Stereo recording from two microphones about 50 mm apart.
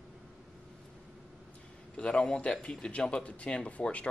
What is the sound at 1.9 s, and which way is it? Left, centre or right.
A man's voice, centre.